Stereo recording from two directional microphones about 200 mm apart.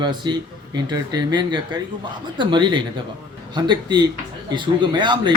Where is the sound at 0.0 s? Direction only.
20° right (ahead or behind).